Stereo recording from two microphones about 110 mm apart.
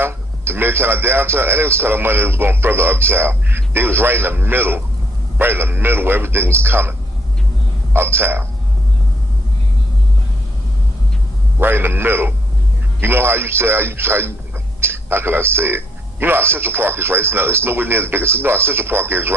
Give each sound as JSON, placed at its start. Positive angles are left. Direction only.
{"t": 0.0, "sound": "a man's voice", "side_deg": -20}
{"t": 7.9, "sound": "a man's voice", "side_deg": -20}
{"t": 11.6, "sound": "a man's voice", "side_deg": -20}